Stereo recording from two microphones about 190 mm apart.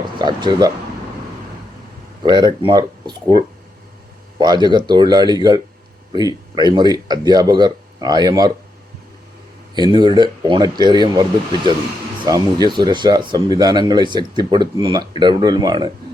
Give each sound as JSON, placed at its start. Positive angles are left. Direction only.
{"t": 0.2, "sound": "speech", "side_deg": -25}
{"t": 2.2, "sound": "speech", "side_deg": -25}
{"t": 9.9, "sound": "speech", "side_deg": -25}